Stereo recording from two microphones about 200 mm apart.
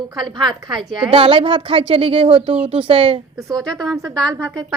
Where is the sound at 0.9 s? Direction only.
25° right (ahead or behind).